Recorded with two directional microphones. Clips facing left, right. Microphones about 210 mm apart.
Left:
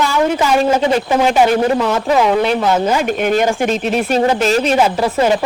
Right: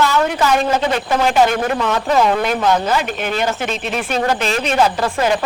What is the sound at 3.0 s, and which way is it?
Speech, 50° left (ahead or behind).